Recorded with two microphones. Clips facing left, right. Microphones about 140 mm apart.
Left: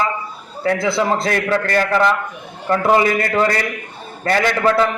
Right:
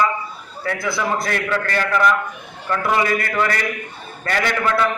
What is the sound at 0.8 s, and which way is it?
A man's voice, 25° left (ahead or behind).